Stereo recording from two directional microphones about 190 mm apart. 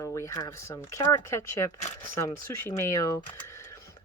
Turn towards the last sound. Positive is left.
turn(degrees=15)  # may be behind; listen again after turning